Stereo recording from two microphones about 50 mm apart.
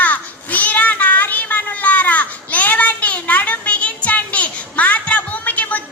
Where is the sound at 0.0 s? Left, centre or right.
Left.